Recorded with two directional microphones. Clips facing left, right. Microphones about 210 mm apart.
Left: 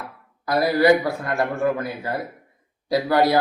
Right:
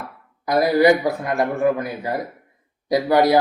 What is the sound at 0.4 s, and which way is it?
Speech, 20° right (ahead or behind).